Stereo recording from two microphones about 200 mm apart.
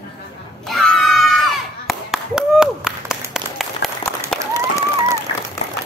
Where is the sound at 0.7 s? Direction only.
Centre (ahead or behind).